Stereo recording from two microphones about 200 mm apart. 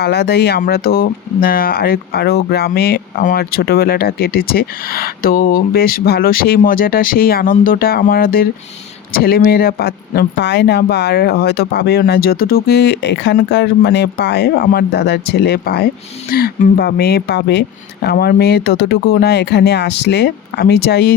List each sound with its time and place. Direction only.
0.0 s speech: 55° left (ahead or behind)